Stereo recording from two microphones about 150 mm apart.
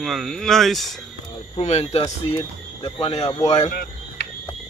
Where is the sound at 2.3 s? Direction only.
30° left (ahead or behind).